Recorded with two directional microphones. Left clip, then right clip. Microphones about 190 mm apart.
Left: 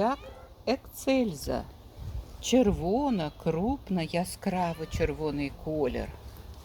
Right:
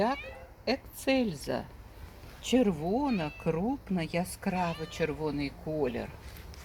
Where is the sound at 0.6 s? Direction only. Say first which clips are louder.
Left 2 dB; 5° left (ahead or behind).